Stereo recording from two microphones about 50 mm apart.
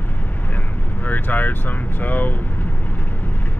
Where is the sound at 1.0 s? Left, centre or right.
Left.